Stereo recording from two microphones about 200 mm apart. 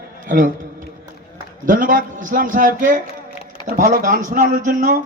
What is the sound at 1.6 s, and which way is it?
A man's voice, 40° right (ahead or behind).